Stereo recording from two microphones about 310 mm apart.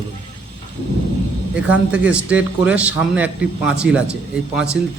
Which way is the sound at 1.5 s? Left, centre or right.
Centre.